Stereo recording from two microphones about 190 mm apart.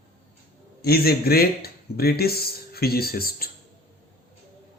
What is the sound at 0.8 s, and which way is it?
Speech, 55° left (ahead or behind).